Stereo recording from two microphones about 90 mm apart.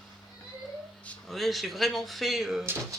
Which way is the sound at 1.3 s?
Centre (ahead or behind).